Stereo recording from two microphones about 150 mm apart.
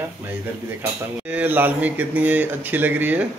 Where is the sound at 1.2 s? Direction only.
10° right (ahead or behind).